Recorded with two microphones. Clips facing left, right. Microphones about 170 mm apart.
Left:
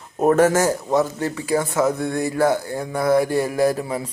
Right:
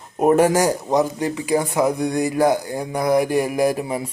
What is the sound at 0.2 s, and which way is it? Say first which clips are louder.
Speech: right 1 dB; 10° right (ahead or behind).